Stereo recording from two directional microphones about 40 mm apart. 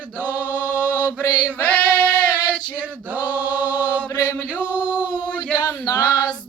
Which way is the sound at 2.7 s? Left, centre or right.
Right.